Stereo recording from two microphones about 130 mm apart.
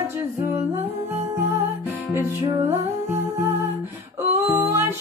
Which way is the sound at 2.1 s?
20° right (ahead or behind).